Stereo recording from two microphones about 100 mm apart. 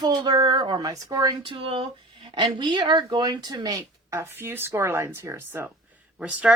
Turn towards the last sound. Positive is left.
turn(degrees=-15)  # may be behind; listen again after turning